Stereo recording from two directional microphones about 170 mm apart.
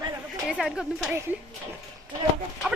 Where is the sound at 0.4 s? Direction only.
Centre (ahead or behind).